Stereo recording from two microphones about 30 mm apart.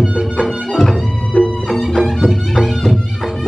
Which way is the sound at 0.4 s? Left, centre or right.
Centre.